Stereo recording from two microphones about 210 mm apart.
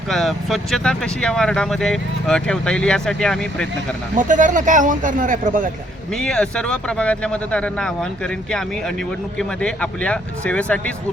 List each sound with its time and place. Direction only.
0.1 s speech: centre (ahead or behind)
4.1 s speech: 40° right (ahead or behind)
6.1 s speech: 5° left (ahead or behind)
9.4 s speech: 5° left (ahead or behind)